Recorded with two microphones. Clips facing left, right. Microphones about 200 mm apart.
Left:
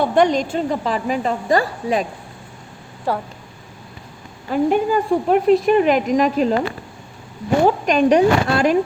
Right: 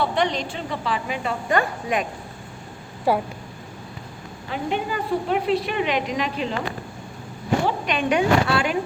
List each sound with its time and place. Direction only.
0.0 s a woman's voice: 45° left (ahead or behind)
3.1 s speech: 10° right (ahead or behind)
4.5 s speech: 45° left (ahead or behind)
7.6 s a woman's voice: 40° left (ahead or behind)